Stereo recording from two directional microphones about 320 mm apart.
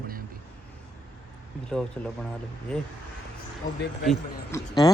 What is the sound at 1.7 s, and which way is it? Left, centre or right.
Speech, centre.